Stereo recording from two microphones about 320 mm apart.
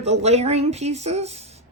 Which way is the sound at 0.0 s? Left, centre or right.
Centre.